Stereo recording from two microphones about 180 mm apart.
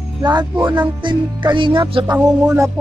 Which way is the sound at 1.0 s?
25° right (ahead or behind).